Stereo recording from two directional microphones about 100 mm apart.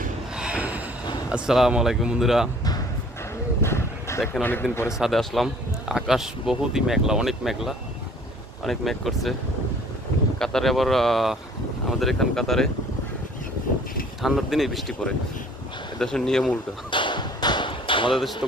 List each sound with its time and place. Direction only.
0.3 s a sound: 10° right (ahead or behind)
1.3 s speech: 5° right (ahead or behind)
3.6 s a sound: 25° left (ahead or behind)
4.7 s speech: 25° left (ahead or behind)
4.9 s speech: centre (ahead or behind)
10.3 s speech: 5° left (ahead or behind)
14.2 s speech: centre (ahead or behind)
16.9 s tap: 55° left (ahead or behind)
18.1 s speech: centre (ahead or behind)